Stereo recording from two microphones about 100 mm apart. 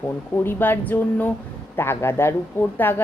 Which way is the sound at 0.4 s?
20° left (ahead or behind).